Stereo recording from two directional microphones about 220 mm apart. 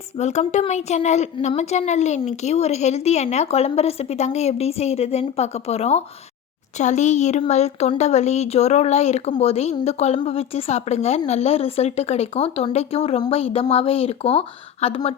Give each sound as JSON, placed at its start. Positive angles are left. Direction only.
{"t": 0.2, "sound": "a woman's voice", "side_deg": 30}